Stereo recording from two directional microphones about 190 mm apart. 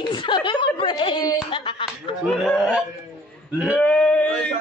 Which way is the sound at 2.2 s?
Centre (ahead or behind).